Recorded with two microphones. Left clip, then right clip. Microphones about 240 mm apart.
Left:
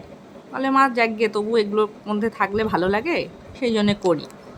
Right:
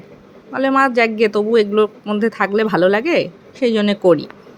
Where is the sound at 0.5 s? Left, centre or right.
Centre.